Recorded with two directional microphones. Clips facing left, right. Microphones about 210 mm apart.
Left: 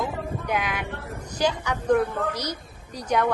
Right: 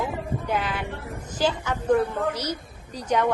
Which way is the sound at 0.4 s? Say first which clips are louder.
Even; 10° left (ahead or behind).